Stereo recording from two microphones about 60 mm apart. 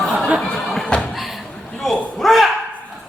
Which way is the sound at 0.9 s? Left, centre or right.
Centre.